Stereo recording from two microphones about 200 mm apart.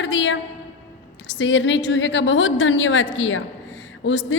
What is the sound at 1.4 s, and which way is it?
A woman's voice, 65° left (ahead or behind).